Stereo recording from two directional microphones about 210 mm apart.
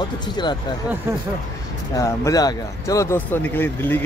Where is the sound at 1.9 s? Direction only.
15° left (ahead or behind).